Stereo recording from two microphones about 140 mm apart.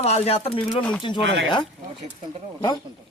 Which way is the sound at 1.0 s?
35° left (ahead or behind).